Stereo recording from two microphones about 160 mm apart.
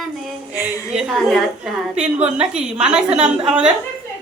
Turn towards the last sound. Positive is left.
turn(degrees=-5)  # may be behind; listen again after turning